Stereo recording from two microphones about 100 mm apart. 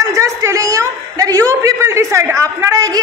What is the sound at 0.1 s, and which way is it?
A man's voice, 30° right (ahead or behind).